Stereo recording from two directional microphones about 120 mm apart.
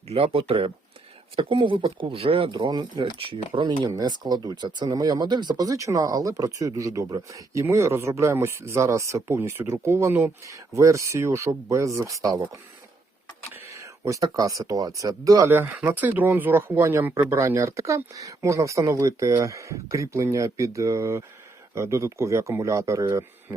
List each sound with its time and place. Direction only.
0.1 s speech: 55° right (ahead or behind); by 12.5 s 30° right (ahead or behind)
13.5 s speech: 25° right (ahead or behind)
15.5 s speech: 20° right (ahead or behind)